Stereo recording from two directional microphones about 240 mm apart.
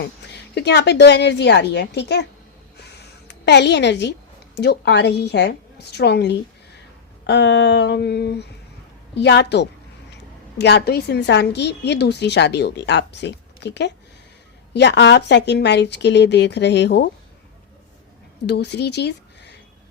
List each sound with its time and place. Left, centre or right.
0.5 s a woman's voice: left
3.0 s a sound: left
4.5 s a woman's voice: left
18.4 s speech: left